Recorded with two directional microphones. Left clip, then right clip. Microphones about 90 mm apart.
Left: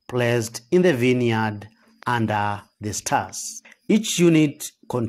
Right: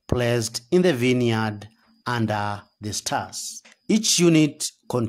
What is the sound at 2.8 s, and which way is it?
Speech, 5° right (ahead or behind).